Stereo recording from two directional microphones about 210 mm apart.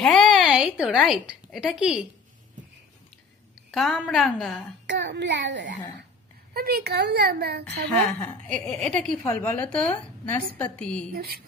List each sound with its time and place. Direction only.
0.0 s a sound: 5° left (ahead or behind)
3.7 s a woman's voice: centre (ahead or behind)
4.9 s a child's voice: 55° right (ahead or behind)
6.5 s a woman's voice: 45° right (ahead or behind)
8.4 s a woman's voice: 5° left (ahead or behind)
11.1 s a woman's voice: 45° right (ahead or behind)